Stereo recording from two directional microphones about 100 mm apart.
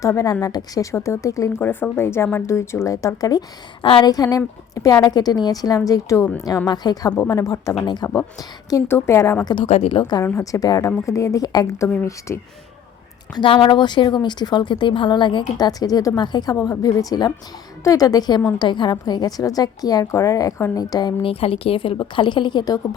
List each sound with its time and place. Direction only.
0.0 s a woman's voice: 35° left (ahead or behind)
1.6 s speech: 20° left (ahead or behind); by 3.4 s 40° left (ahead or behind)
3.8 s a woman's voice: 60° left (ahead or behind)
4.1 s a woman's voice: 40° left (ahead or behind)
9.6 s a woman's voice: 80° left; by 10.2 s 55° left (ahead or behind)
10.4 s a woman's voice: 35° left (ahead or behind)
12.3 s speech: 30° left (ahead or behind)
13.4 s a woman's voice: 55° left (ahead or behind); by 21.2 s 40° left (ahead or behind)
21.2 s a woman's voice: 70° left (ahead or behind); by 22.8 s 45° left (ahead or behind)